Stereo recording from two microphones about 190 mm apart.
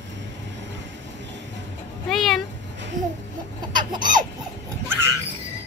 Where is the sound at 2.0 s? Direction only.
Centre (ahead or behind).